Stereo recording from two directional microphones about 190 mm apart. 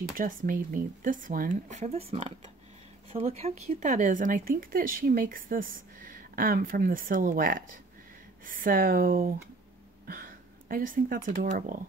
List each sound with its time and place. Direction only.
0.2 s speech: 45° right (ahead or behind)